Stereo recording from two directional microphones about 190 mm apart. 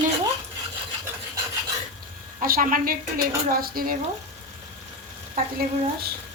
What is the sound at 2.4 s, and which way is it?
A woman's voice, 45° right (ahead or behind).